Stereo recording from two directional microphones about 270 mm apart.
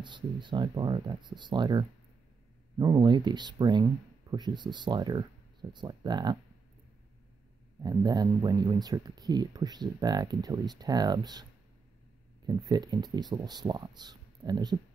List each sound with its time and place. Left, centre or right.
0.0 s speech: centre
7.8 s speech: centre
12.4 s speech: centre